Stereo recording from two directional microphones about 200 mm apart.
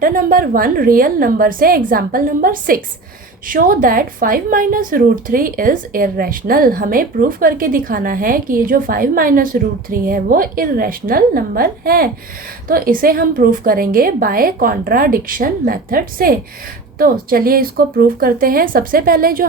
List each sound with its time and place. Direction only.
0.0 s speech: 45° right (ahead or behind)